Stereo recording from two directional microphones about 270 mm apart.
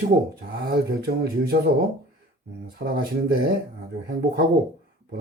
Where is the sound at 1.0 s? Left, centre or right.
Right.